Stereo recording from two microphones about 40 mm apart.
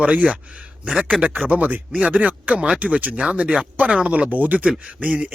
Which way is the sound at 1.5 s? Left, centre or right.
Right.